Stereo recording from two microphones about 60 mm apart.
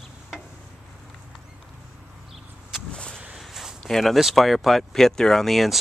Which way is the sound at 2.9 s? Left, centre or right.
Centre.